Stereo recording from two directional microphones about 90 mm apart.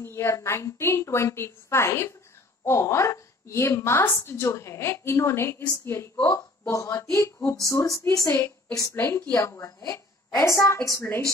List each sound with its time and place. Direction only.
0.0 s a woman's voice: 30° left (ahead or behind)
8.3 s a woman's voice: 25° left (ahead or behind); by 10.7 s 45° left (ahead or behind)
10.7 s a woman's voice: 30° left (ahead or behind)